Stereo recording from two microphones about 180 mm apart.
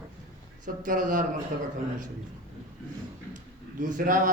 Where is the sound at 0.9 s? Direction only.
45° right (ahead or behind).